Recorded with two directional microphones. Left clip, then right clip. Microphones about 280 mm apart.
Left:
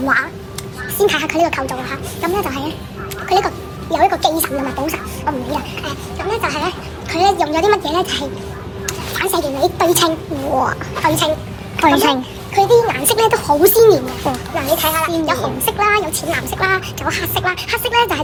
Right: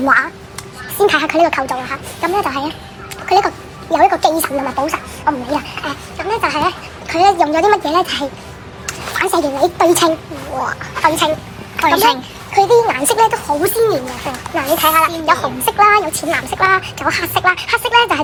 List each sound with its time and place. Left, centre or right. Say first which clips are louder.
0.0 s a child's voice: right 3 dB; right
10.6 s speech: right 4 dB; centre
12.5 s speech: right 1 dB; right
13.2 s speech: left 2 dB; centre
14.5 s a child's voice: right 5 dB; centre